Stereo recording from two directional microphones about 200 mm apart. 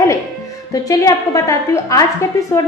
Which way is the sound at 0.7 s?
15° left (ahead or behind).